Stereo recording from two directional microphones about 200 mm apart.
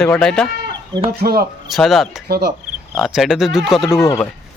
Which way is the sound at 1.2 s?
50° right (ahead or behind).